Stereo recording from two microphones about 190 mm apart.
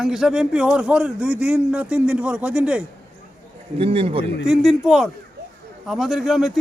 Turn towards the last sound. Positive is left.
turn(degrees=0)  # may be behind; listen again after turning